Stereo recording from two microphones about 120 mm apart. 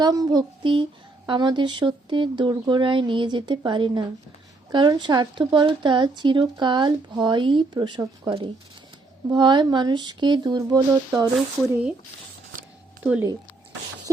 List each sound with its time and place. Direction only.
0.0 s a woman's voice: 30° right (ahead or behind)
9.3 s a woman's voice: 40° right (ahead or behind)
11.7 s speech: 10° right (ahead or behind)
13.0 s speech: 10° right (ahead or behind)